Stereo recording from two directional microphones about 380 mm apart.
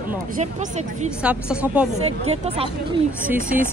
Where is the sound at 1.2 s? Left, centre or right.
Centre.